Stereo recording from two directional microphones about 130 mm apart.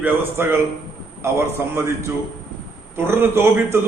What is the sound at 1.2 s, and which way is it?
A man's voice, 20° right (ahead or behind).